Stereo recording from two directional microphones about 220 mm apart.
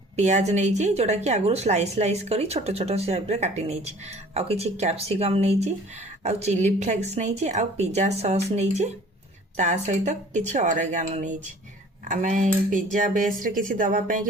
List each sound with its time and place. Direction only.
0.2 s a woman's voice: 30° right (ahead or behind)